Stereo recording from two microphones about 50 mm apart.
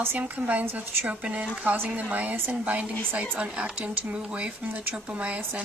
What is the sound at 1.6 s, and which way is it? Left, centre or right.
Speech, right.